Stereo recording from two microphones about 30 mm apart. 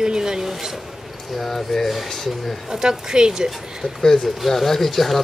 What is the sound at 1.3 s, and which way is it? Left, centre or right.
Speech, centre.